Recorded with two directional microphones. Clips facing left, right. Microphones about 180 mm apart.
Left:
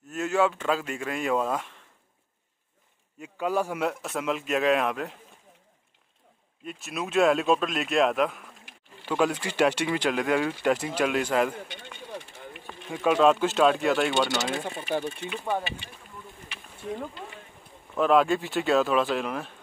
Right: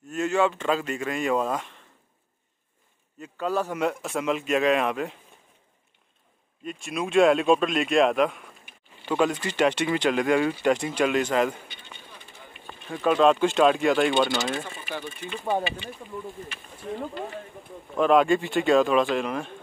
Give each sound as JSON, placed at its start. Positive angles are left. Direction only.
{"t": 0.1, "sound": "speech", "side_deg": 5}
{"t": 3.2, "sound": "speech", "side_deg": 10}
{"t": 6.6, "sound": "speech", "side_deg": 5}
{"t": 11.6, "sound": "a sound", "side_deg": 85}
{"t": 12.6, "sound": "speech", "side_deg": 5}
{"t": 14.8, "sound": "speech", "side_deg": 30}
{"t": 15.5, "sound": "speech", "side_deg": -15}
{"t": 17.9, "sound": "speech", "side_deg": 0}